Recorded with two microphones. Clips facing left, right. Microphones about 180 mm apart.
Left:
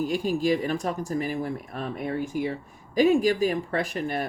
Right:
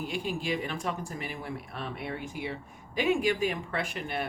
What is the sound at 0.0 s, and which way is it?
Speech, 40° left (ahead or behind).